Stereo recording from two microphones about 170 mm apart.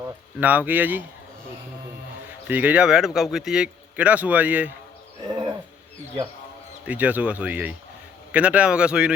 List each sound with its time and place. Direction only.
0.3 s speech: 10° right (ahead or behind)
2.5 s speech: 10° right (ahead or behind)
5.3 s wild animals: 25° right (ahead or behind)
6.8 s speech: 10° right (ahead or behind)